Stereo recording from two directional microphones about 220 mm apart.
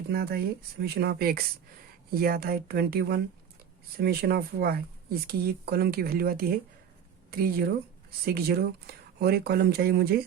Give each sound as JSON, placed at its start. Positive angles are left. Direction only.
{"t": 0.1, "sound": "speech", "side_deg": -45}